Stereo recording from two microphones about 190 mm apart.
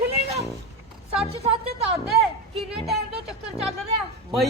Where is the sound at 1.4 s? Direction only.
30° right (ahead or behind).